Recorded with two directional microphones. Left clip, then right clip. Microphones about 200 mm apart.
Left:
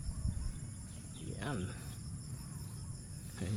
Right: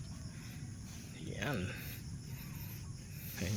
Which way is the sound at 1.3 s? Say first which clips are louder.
Right 3 dB; 5° left (ahead or behind).